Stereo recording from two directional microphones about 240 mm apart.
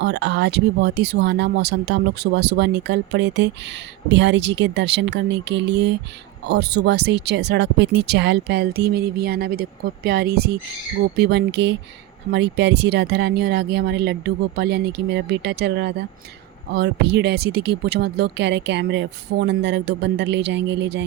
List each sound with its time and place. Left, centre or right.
0.0 s speech: right